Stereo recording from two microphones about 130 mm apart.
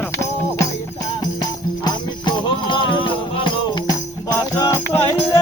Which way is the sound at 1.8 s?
35° left (ahead or behind).